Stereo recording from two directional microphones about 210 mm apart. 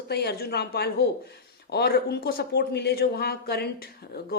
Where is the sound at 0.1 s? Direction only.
50° left (ahead or behind).